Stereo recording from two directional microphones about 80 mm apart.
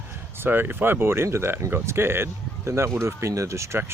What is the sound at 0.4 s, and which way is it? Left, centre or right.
Speech, right.